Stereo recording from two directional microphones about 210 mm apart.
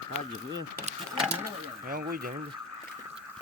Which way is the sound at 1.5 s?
45° right (ahead or behind).